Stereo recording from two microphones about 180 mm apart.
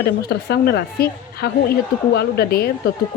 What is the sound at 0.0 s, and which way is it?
Speech, 65° left (ahead or behind).